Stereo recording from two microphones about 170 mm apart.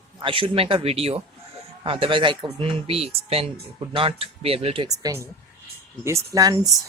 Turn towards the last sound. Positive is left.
turn(degrees=-20)  # may be behind; listen again after turning